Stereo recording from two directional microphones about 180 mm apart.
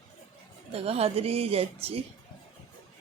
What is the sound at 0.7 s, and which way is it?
Speech, 35° right (ahead or behind).